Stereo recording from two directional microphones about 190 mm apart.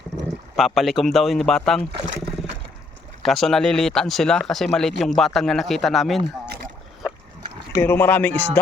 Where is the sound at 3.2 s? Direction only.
Centre (ahead or behind).